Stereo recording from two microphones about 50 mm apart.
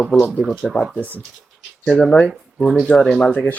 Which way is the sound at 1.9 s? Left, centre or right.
Centre.